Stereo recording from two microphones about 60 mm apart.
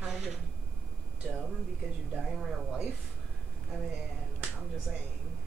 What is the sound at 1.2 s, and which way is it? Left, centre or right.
Speech, centre.